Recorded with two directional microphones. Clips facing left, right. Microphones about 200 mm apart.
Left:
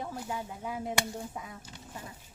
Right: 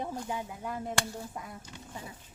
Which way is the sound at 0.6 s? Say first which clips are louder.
Left 2 dB; 10° left (ahead or behind).